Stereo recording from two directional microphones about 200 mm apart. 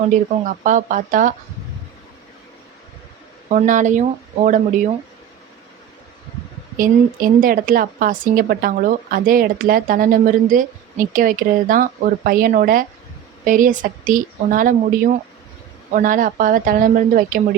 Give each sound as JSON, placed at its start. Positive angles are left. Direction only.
{"t": 0.1, "sound": "speech", "side_deg": -40}
{"t": 3.5, "sound": "speech", "side_deg": -40}
{"t": 6.7, "sound": "speech", "side_deg": -45}